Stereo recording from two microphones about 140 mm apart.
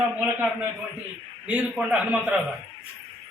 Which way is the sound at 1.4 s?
10° right (ahead or behind).